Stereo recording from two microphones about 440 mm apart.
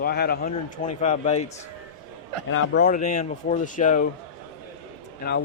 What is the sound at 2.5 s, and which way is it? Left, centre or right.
Speech, left.